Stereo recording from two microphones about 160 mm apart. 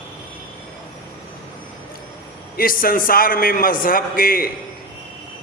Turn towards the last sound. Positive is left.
turn(degrees=65)  # may be behind; listen again after turning